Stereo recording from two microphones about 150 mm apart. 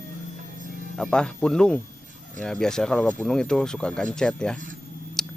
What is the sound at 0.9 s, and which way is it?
Speech, 5° left (ahead or behind).